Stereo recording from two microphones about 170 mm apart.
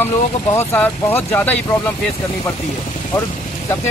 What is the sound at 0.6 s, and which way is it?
Speech, 10° left (ahead or behind).